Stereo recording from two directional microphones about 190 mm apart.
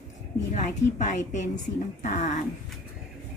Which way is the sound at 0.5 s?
40° left (ahead or behind).